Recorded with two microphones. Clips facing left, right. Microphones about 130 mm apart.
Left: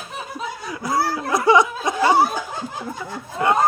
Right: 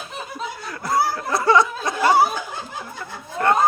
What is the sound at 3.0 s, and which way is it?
Speech, 10° left (ahead or behind).